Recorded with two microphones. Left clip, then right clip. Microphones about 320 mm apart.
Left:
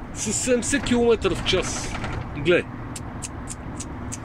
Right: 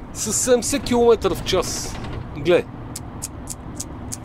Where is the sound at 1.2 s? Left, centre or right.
Centre.